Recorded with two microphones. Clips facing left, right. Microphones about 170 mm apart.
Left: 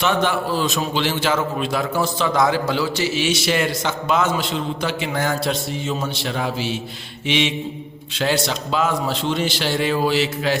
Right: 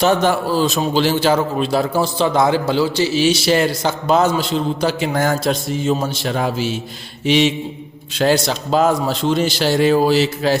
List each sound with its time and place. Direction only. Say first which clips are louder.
0.0 s a man's voice: right 5 dB; 40° right (ahead or behind)